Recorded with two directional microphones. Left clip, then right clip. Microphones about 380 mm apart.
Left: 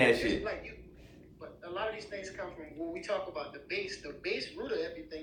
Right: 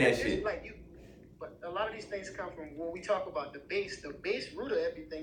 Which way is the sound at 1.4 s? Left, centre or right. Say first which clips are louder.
Right 2 dB; centre.